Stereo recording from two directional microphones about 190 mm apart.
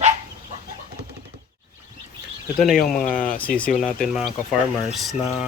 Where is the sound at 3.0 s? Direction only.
45° left (ahead or behind).